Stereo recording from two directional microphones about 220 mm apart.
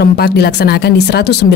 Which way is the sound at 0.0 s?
45° left (ahead or behind).